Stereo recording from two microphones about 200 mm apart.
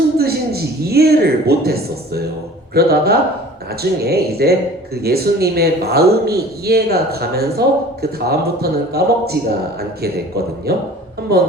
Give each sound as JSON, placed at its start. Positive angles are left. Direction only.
{"t": 0.2, "sound": "a man's voice", "side_deg": -50}